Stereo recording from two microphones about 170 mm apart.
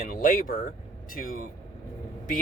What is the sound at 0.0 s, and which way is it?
Speech, 55° left (ahead or behind).